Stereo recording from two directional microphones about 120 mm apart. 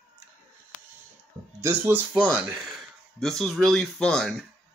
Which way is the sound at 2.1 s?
5° left (ahead or behind).